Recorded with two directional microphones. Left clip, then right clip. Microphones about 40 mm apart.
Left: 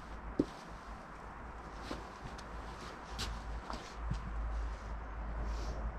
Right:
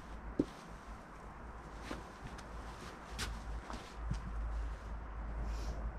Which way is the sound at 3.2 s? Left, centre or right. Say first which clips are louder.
Even; right.